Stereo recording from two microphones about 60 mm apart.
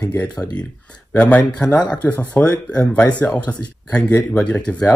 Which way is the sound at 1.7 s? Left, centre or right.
Left.